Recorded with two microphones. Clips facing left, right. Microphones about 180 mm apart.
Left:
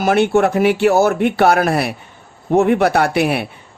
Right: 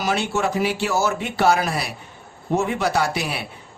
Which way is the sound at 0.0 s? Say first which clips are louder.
Left 9 dB; 55° left (ahead or behind).